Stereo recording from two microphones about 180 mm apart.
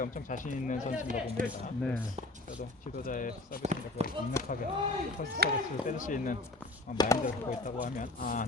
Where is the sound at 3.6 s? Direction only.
40° right (ahead or behind).